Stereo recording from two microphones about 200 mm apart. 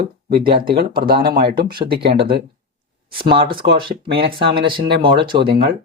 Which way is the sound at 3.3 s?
25° right (ahead or behind).